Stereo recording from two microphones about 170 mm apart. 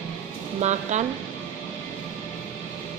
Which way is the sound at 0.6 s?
45° right (ahead or behind).